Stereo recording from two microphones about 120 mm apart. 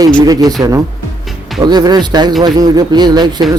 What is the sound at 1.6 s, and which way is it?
Speech, 35° right (ahead or behind).